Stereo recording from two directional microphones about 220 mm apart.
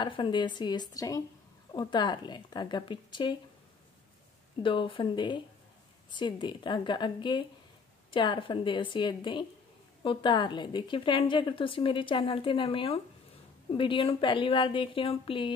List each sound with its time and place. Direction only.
0.0 s a woman's voice: 20° left (ahead or behind)
4.6 s a woman's voice: 25° left (ahead or behind)